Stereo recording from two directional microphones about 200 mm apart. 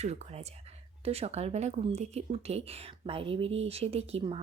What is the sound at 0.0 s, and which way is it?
Speech, 35° right (ahead or behind).